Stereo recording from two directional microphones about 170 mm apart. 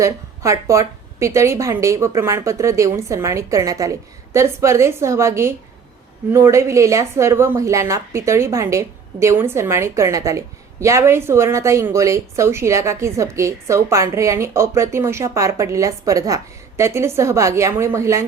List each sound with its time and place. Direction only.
0.0 s speech: 15° right (ahead or behind)